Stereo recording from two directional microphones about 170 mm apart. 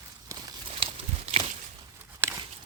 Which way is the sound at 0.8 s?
35° right (ahead or behind).